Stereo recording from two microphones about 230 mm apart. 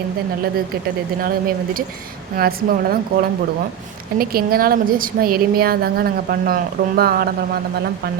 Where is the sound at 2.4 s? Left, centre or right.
Right.